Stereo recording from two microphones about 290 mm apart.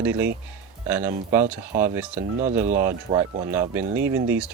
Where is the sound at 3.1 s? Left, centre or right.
Right.